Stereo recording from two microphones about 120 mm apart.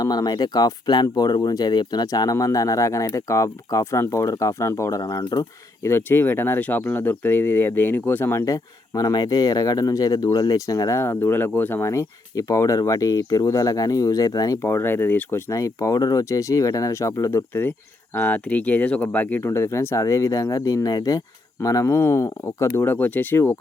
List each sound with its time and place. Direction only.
0.0 s speech: 35° left (ahead or behind)
5.8 s speech: 20° left (ahead or behind)